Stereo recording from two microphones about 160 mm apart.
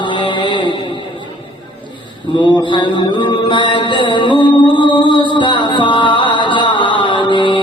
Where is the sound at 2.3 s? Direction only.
25° left (ahead or behind).